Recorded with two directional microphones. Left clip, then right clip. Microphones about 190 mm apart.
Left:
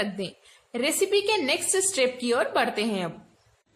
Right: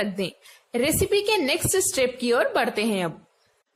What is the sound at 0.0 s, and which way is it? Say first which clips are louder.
A woman's voice: right 3 dB; 30° right (ahead or behind).